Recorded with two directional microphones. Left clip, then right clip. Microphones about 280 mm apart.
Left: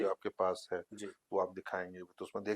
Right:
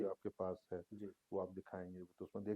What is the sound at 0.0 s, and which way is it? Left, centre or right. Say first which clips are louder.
Speech: left 9 dB; centre.